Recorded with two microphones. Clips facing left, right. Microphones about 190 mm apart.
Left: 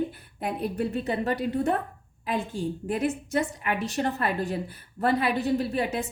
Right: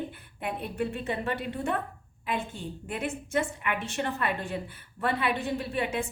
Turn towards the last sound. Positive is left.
turn(degrees=40)  # may be behind; listen again after turning